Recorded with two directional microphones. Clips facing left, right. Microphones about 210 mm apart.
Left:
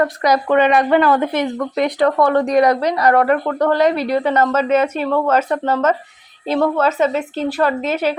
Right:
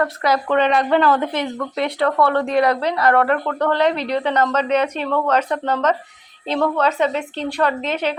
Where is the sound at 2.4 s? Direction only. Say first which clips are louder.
Left 4 dB; 40° left (ahead or behind).